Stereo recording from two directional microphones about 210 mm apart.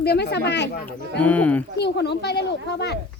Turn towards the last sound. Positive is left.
turn(degrees=50)  # may be behind; listen again after turning